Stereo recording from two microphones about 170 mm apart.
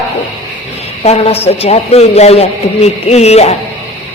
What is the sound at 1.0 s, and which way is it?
A man's voice, 35° left (ahead or behind).